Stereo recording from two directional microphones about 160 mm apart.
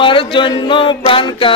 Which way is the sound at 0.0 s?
30° left (ahead or behind).